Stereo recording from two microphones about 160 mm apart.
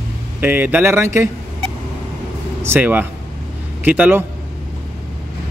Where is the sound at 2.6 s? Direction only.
10° right (ahead or behind).